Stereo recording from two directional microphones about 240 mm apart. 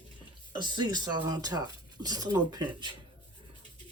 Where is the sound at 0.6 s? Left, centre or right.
Centre.